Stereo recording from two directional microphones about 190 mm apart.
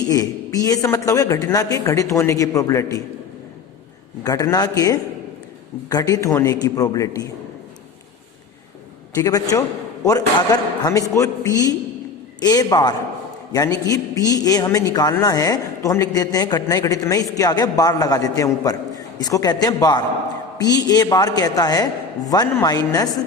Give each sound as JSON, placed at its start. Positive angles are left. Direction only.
{"t": 0.1, "sound": "a woman's voice", "side_deg": 20}
{"t": 4.2, "sound": "a man's voice", "side_deg": 20}
{"t": 9.1, "sound": "a man's voice", "side_deg": 20}